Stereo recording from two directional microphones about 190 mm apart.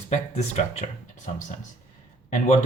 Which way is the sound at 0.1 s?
35° left (ahead or behind).